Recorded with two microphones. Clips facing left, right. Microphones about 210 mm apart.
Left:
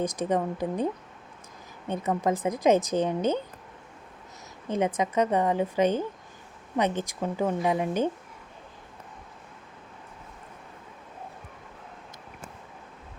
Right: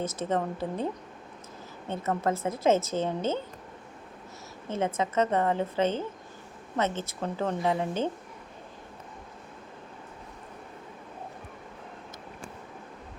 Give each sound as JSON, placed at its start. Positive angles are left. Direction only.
{"t": 0.0, "sound": "a woman's voice", "side_deg": 15}
{"t": 1.9, "sound": "a woman's voice", "side_deg": 15}
{"t": 4.7, "sound": "a woman's voice", "side_deg": 15}